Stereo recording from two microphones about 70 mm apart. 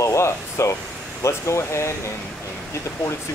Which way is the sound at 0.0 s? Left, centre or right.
Left.